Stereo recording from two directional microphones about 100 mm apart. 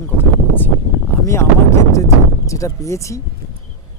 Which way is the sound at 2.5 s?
30° left (ahead or behind).